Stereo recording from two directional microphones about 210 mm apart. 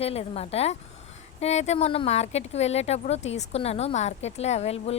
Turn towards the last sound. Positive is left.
turn(degrees=30)  # may be behind; listen again after turning